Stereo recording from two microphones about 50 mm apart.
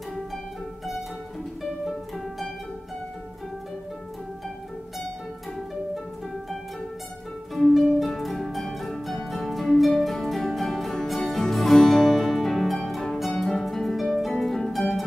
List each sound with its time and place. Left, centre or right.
1.6 s music: centre
7.5 s music: centre
13.2 s harp: centre